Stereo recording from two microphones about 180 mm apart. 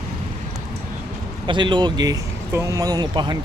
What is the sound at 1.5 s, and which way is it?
Speech, 25° right (ahead or behind).